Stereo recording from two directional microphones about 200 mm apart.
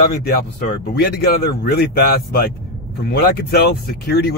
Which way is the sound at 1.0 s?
50° left (ahead or behind).